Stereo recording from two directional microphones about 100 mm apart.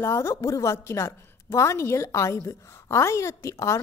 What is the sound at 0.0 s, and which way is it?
A woman's voice, 30° left (ahead or behind).